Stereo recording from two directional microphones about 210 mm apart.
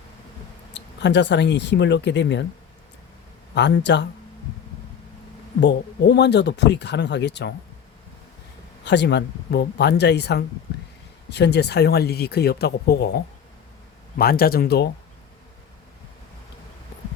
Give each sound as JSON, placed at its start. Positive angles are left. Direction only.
{"t": 0.7, "sound": "speech", "side_deg": 55}
{"t": 3.5, "sound": "speech", "side_deg": 55}
{"t": 5.5, "sound": "speech", "side_deg": 55}
{"t": 8.8, "sound": "speech", "side_deg": 55}